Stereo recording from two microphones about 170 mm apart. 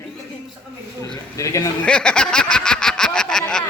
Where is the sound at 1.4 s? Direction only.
20° left (ahead or behind).